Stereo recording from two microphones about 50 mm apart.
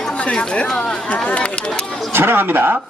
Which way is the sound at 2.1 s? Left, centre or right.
Right.